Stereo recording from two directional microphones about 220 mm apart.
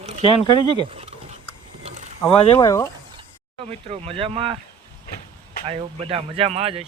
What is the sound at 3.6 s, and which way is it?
Speech, 25° right (ahead or behind).